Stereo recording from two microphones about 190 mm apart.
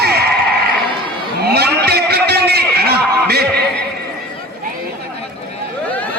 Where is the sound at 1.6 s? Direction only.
55° right (ahead or behind).